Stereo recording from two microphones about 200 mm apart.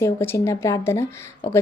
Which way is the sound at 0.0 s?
15° left (ahead or behind).